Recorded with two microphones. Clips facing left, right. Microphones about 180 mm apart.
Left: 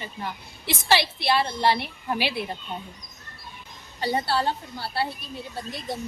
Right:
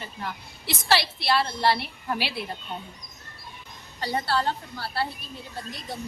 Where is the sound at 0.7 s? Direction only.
20° left (ahead or behind).